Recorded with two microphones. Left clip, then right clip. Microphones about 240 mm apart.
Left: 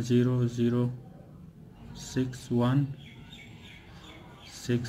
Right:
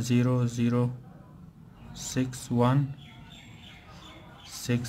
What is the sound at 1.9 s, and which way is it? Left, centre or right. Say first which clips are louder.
Speech: right 1 dB; right.